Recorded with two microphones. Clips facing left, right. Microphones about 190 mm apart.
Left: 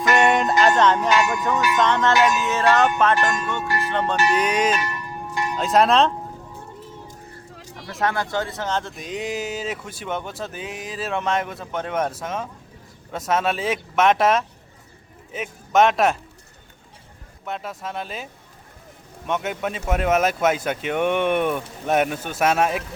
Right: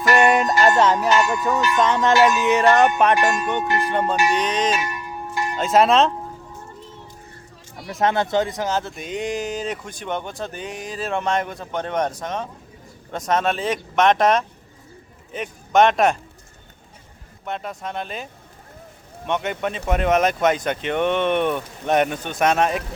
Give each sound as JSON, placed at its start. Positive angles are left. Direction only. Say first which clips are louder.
{"t": 0.1, "sound": "music", "louder": "right 2 dB", "side_deg": 0}
{"t": 4.3, "sound": "music", "louder": "left 1 dB", "side_deg": 10}
{"t": 4.7, "sound": "a sound", "louder": "even", "side_deg": -10}
{"t": 5.4, "sound": "speech", "louder": "right 1 dB", "side_deg": 0}
{"t": 7.9, "sound": "speech", "louder": "right 4 dB", "side_deg": -20}
{"t": 17.4, "sound": "speech", "louder": "right 1 dB", "side_deg": 0}
{"t": 19.3, "sound": "speech", "louder": "right 1 dB", "side_deg": 5}